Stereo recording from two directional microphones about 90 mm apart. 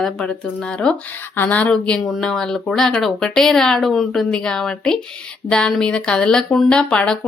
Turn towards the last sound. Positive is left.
turn(degrees=10)  # may be behind; listen again after turning